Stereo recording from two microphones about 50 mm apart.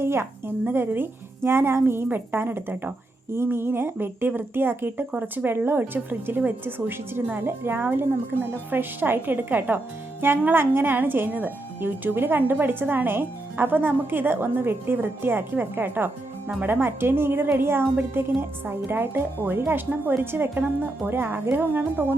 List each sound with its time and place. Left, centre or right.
0.0 s speech: right
0.6 s speech: right